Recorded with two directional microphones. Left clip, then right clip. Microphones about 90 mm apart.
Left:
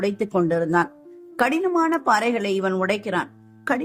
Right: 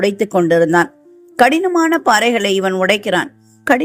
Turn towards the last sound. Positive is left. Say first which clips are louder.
# right 10 dB
turn(degrees=-40)  # may be behind; listen again after turning